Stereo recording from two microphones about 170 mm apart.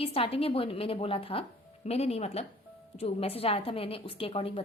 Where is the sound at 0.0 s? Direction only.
35° left (ahead or behind).